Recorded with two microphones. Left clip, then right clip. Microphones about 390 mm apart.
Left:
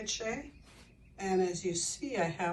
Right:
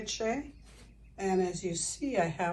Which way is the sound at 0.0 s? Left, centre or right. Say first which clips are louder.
Right 3 dB; centre.